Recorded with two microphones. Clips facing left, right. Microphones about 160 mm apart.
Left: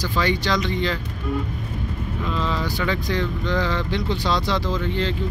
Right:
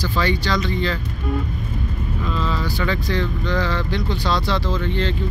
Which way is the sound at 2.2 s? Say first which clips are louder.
Even; 20° left (ahead or behind).